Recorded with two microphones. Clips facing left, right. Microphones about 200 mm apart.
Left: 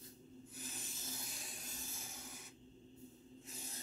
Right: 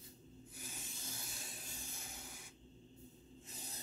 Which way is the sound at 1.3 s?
Centre (ahead or behind).